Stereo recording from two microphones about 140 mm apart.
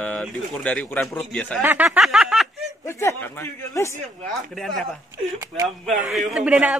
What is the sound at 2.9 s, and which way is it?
A man's voice, 20° left (ahead or behind).